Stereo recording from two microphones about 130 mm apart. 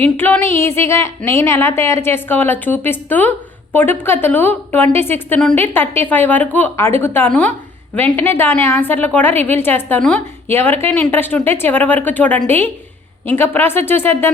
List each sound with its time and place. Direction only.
0.0 s a woman's voice: 15° left (ahead or behind)